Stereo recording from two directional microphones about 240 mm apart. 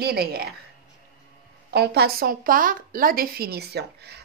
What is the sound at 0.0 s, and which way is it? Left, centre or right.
Speech, right.